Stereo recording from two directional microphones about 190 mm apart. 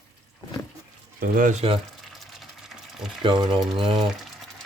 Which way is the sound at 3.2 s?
25° right (ahead or behind).